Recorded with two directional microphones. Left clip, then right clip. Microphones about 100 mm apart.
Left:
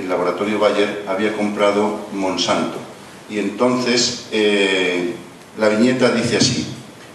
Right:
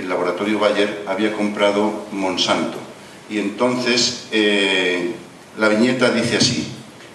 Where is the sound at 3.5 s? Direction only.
20° right (ahead or behind).